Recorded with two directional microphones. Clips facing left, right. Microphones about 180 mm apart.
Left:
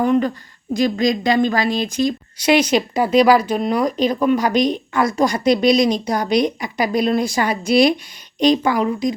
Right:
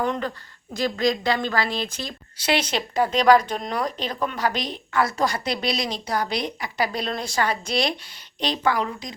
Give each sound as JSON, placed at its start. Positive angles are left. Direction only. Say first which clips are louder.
{"t": 0.0, "sound": "a woman's voice", "louder": "left 9 dB", "side_deg": 10}